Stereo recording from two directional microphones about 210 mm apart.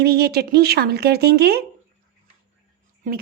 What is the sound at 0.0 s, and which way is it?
Speech, 50° right (ahead or behind).